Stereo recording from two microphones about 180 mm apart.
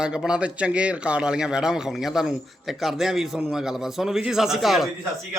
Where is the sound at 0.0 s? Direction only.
5° right (ahead or behind).